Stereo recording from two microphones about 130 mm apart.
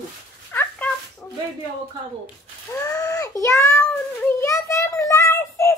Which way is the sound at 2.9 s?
25° left (ahead or behind).